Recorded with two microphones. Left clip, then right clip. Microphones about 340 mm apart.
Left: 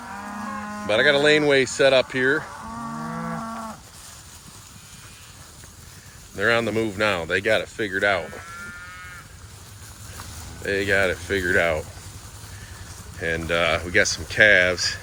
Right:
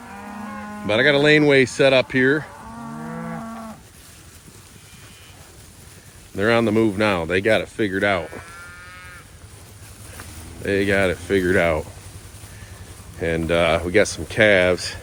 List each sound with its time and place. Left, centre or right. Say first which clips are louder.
0.0 s moo: left 2 dB; left
0.9 s speech: right 2 dB; right
2.6 s livestock: left 3 dB; left
6.3 s speech: right 3 dB; right
10.7 s speech: right 2 dB; right
13.2 s speech: right 3 dB; centre